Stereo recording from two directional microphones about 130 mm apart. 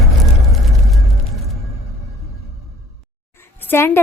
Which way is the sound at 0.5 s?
Centre (ahead or behind).